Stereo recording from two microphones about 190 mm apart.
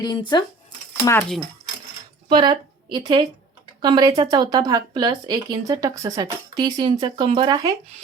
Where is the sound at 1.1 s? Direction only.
5° left (ahead or behind).